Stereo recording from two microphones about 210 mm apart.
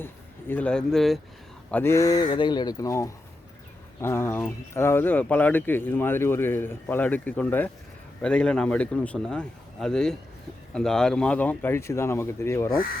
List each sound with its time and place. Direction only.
0.0 s a man's voice: 10° left (ahead or behind)
1.7 s a man's voice: 10° left (ahead or behind)